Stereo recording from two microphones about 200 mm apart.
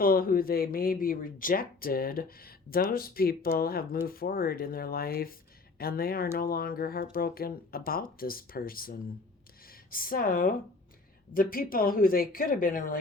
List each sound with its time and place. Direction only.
0.0 s speech: 45° left (ahead or behind)